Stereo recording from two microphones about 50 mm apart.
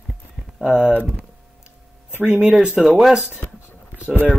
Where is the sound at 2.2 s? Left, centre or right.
Centre.